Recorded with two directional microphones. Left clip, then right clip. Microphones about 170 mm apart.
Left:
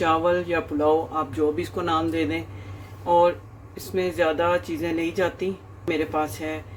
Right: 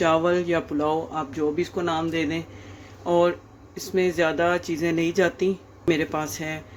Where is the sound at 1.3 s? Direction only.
20° right (ahead or behind).